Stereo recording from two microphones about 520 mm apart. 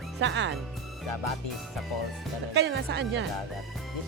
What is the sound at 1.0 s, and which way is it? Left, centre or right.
Music, left.